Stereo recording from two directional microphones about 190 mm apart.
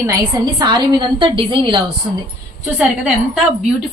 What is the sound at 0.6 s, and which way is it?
A woman's voice, 20° right (ahead or behind).